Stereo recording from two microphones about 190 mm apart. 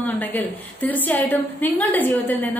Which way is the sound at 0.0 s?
10° left (ahead or behind).